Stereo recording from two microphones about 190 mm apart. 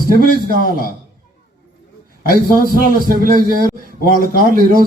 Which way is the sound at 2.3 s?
50° right (ahead or behind).